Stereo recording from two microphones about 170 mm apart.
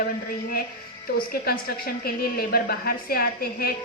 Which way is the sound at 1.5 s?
65° left (ahead or behind).